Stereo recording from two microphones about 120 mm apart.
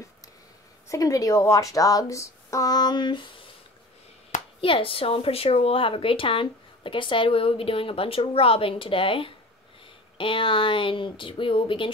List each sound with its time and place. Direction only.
0.8 s speech: 30° left (ahead or behind)
4.6 s a woman's voice: 50° left (ahead or behind)